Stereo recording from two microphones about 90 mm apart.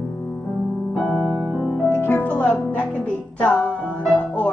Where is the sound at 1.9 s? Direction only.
25° left (ahead or behind).